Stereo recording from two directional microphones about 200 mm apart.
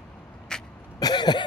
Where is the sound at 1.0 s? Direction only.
20° left (ahead or behind).